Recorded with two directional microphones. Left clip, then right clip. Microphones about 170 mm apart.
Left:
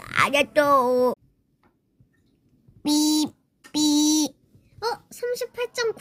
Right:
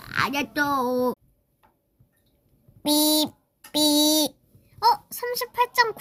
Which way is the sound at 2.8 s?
25° right (ahead or behind).